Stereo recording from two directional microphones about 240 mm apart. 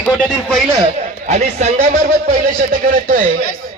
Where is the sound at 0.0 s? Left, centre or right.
Centre.